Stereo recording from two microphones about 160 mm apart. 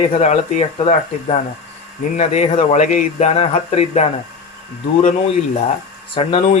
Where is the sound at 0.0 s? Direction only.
40° left (ahead or behind).